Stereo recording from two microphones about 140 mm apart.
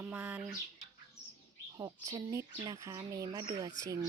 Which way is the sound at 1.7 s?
25° right (ahead or behind).